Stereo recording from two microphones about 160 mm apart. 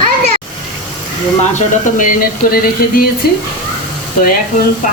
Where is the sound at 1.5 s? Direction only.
55° left (ahead or behind).